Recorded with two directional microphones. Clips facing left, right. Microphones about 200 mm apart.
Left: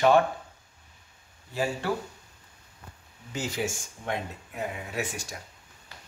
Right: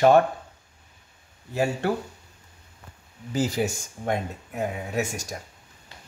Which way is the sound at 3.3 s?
40° right (ahead or behind).